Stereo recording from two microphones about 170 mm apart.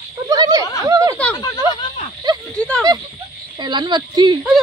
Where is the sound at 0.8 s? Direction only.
20° right (ahead or behind).